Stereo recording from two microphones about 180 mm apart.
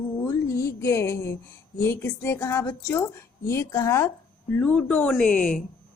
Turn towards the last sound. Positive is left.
turn(degrees=5)  # may be behind; listen again after turning